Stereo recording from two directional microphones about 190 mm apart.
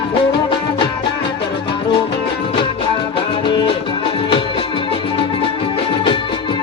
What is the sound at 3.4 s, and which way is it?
Music, 25° left (ahead or behind).